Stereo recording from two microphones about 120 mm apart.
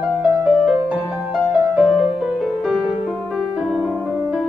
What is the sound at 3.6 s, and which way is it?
Piano, 5° right (ahead or behind).